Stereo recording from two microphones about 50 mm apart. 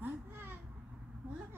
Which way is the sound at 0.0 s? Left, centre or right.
Right.